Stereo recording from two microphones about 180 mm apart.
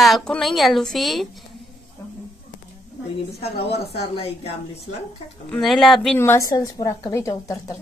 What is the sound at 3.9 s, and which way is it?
Speech, 35° left (ahead or behind).